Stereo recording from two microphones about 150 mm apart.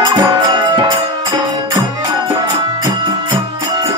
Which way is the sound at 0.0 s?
30° right (ahead or behind).